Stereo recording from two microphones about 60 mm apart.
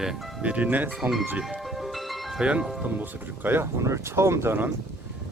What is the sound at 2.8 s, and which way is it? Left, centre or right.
Speech, right.